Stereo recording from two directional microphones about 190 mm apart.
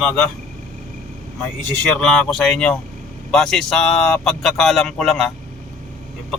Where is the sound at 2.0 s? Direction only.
5° left (ahead or behind).